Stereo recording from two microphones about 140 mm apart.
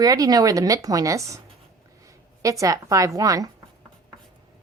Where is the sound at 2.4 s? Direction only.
25° right (ahead or behind).